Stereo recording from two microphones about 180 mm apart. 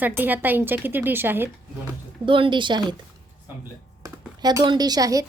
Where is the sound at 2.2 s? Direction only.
30° right (ahead or behind).